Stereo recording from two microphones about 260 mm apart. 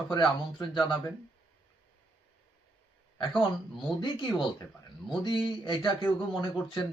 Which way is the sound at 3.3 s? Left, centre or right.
Centre.